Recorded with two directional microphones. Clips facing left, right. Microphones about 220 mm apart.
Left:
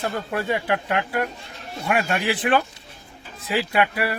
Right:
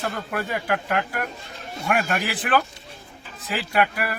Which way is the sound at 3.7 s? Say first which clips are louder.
Right 1 dB; 25° left (ahead or behind).